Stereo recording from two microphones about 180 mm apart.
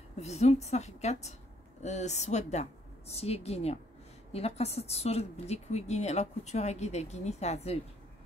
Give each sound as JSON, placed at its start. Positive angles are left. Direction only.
{"t": 0.2, "sound": "a woman's voice", "side_deg": 35}